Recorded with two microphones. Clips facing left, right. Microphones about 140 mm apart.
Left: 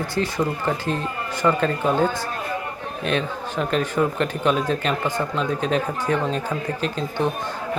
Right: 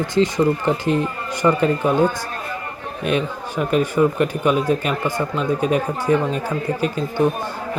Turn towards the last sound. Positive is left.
turn(degrees=-10)  # may be behind; listen again after turning